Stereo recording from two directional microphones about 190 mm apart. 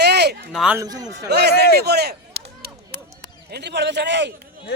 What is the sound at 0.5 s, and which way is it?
Speech, 5° right (ahead or behind).